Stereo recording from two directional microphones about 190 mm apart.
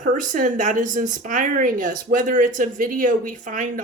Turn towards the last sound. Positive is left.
turn(degrees=-45)  # may be behind; listen again after turning